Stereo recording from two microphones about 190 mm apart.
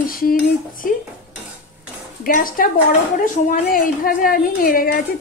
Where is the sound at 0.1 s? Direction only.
50° left (ahead or behind).